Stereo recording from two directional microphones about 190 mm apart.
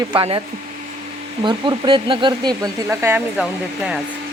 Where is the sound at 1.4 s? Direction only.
25° right (ahead or behind).